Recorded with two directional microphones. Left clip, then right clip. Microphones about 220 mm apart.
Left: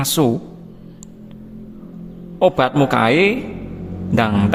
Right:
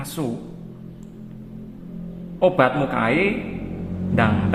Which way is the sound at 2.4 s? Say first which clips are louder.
Left 3 dB; 50° left (ahead or behind).